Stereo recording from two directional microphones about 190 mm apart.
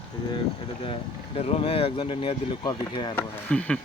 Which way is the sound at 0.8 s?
30° left (ahead or behind).